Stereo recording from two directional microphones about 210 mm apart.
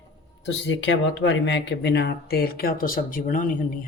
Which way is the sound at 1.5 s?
55° left (ahead or behind).